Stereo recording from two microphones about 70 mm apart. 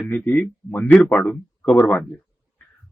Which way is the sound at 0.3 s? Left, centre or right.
Left.